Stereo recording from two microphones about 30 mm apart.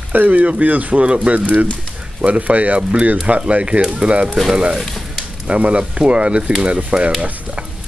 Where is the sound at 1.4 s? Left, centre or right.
Right.